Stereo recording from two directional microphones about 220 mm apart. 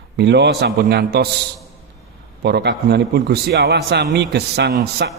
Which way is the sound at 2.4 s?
50° right (ahead or behind).